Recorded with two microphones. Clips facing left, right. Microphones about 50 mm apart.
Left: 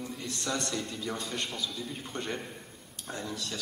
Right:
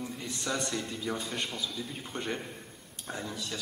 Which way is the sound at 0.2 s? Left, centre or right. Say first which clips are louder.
Even; centre.